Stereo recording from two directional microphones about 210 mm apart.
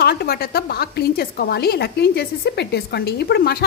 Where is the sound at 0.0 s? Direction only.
50° left (ahead or behind).